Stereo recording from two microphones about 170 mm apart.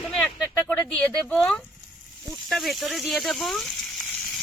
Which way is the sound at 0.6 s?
10° left (ahead or behind).